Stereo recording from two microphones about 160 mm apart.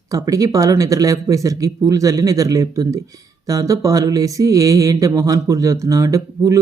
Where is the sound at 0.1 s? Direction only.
20° right (ahead or behind).